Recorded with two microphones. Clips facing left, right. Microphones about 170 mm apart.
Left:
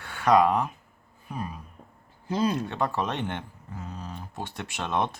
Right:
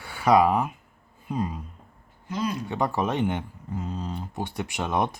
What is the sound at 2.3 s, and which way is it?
Speech, 30° left (ahead or behind).